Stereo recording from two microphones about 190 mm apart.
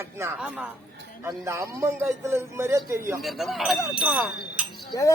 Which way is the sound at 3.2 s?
Centre (ahead or behind).